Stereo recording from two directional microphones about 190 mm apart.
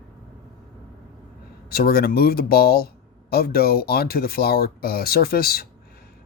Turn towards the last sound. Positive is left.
turn(degrees=55)  # may be behind; listen again after turning